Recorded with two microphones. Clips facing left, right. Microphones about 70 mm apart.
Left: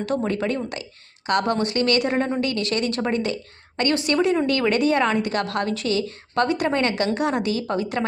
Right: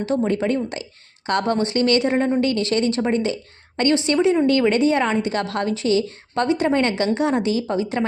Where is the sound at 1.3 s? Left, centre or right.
Right.